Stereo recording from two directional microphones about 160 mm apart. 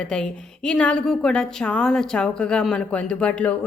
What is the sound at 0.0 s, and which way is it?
Speech, 5° left (ahead or behind).